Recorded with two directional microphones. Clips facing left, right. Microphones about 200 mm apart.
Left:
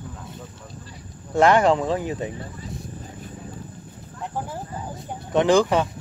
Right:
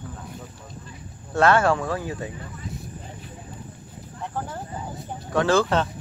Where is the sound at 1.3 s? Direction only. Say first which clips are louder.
Left 2 dB; 15° left (ahead or behind).